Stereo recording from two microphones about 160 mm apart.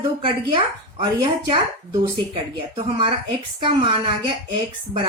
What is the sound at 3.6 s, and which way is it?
Speech, 30° right (ahead or behind).